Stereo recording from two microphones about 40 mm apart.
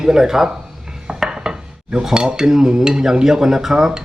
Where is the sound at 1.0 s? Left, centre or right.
Centre.